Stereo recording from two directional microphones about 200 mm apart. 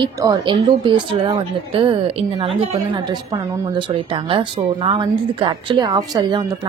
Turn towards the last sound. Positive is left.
turn(degrees=-20)  # may be behind; listen again after turning